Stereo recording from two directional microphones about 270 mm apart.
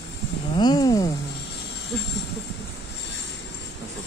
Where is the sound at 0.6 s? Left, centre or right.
Centre.